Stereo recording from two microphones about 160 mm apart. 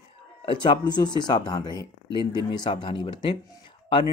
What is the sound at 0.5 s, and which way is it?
Speech, 30° left (ahead or behind).